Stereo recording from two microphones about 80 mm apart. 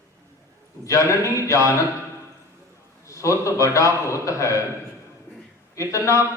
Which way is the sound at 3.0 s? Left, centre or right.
Left.